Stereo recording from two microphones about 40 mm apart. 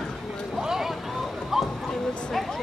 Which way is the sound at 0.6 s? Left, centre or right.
Centre.